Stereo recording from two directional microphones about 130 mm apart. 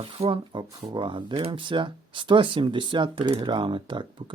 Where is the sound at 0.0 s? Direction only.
45° right (ahead or behind).